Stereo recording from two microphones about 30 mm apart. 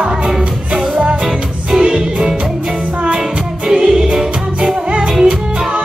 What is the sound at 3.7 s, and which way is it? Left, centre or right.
Music, centre.